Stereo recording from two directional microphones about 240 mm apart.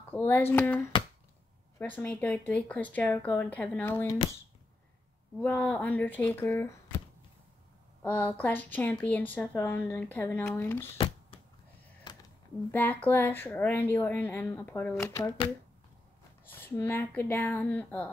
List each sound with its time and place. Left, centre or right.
0.1 s speech: centre
5.4 s speech: centre
8.0 s speech: centre
12.1 s a sound: centre
12.7 s speech: centre
16.4 s speech: centre